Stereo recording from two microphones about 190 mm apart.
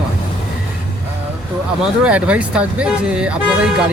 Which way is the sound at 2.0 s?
5° right (ahead or behind).